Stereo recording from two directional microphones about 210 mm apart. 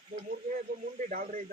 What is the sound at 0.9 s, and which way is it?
Speech, 40° right (ahead or behind).